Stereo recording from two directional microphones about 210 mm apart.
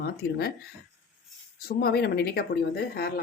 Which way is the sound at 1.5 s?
45° left (ahead or behind).